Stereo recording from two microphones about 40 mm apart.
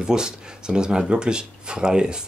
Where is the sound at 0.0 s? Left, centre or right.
Centre.